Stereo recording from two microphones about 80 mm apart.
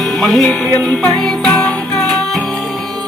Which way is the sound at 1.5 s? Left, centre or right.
Left.